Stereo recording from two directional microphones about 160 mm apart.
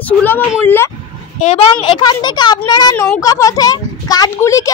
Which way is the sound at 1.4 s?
40° left (ahead or behind).